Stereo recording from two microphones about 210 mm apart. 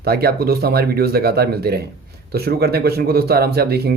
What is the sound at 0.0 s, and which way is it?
Speech, 50° right (ahead or behind).